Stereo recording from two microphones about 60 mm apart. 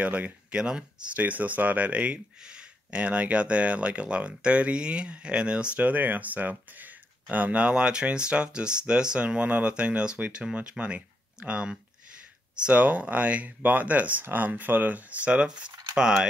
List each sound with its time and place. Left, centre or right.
0.0 s speech: right